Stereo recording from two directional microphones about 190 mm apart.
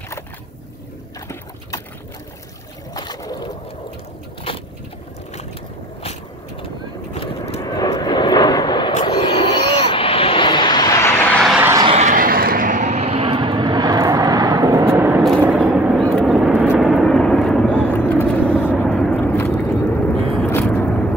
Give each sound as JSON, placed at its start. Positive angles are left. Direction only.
{"t": 2.9, "sound": "boat", "side_deg": 20}
{"t": 7.2, "sound": "vehicle", "side_deg": 30}
{"t": 11.5, "sound": "vehicle", "side_deg": -10}
{"t": 11.8, "sound": "vehicle", "side_deg": -35}